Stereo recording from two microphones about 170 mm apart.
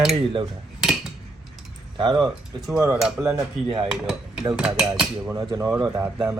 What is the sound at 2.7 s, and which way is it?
Speech, 15° right (ahead or behind).